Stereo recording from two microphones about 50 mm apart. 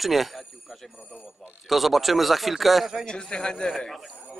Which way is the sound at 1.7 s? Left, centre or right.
Centre.